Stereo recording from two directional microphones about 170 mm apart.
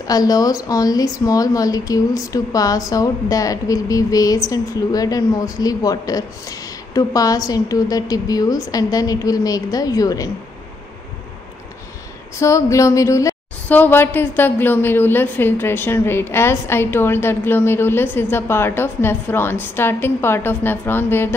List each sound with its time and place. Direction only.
0.0 s a woman's voice: 20° left (ahead or behind)
12.4 s a woman's voice: 20° left (ahead or behind)